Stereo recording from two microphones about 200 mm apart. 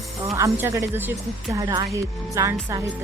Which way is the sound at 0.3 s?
10° right (ahead or behind).